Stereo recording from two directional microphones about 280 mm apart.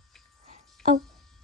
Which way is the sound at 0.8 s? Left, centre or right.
Centre.